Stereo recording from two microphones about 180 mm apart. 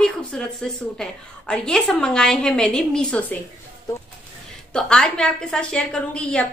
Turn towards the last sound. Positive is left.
turn(degrees=5)  # may be behind; listen again after turning